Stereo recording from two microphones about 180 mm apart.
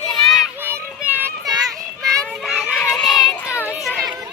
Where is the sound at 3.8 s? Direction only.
Centre (ahead or behind).